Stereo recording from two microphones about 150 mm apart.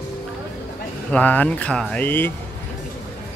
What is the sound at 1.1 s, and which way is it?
Speech, 10° left (ahead or behind).